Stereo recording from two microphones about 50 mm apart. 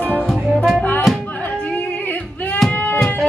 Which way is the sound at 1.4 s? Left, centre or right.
Left.